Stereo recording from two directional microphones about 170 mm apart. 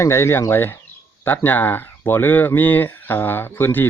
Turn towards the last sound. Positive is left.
turn(degrees=10)  # may be behind; listen again after turning